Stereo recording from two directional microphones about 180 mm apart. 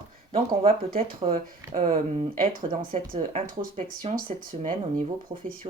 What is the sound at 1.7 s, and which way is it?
Speech, 40° right (ahead or behind).